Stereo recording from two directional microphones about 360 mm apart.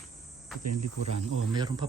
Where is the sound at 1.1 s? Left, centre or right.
Centre.